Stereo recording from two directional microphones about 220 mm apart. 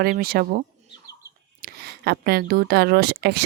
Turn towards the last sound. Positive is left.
turn(degrees=-50)  # may be behind; listen again after turning